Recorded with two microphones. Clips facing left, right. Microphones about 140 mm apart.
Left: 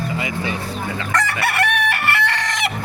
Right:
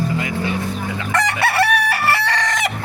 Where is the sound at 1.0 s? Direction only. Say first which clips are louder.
Right 2 dB; 10° right (ahead or behind).